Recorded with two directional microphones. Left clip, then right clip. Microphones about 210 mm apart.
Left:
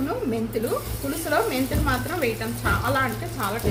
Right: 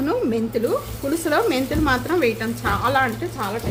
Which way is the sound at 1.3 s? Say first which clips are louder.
Right 2 dB; 50° right (ahead or behind).